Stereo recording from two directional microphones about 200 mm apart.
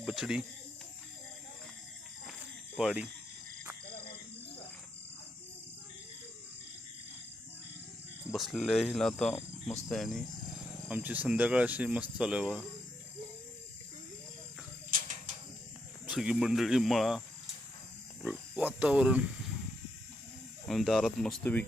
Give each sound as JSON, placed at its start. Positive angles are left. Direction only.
{"t": 0.0, "sound": "speech", "side_deg": 0}
{"t": 2.7, "sound": "speech", "side_deg": -5}
{"t": 8.3, "sound": "speech", "side_deg": 0}
{"t": 14.8, "sound": "a sound", "side_deg": -40}
{"t": 16.0, "sound": "speech", "side_deg": -5}
{"t": 18.2, "sound": "a sound", "side_deg": -5}
{"t": 20.7, "sound": "speech", "side_deg": 0}